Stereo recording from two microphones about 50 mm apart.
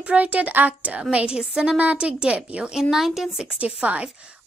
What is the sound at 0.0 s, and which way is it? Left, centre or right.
A woman's voice, right.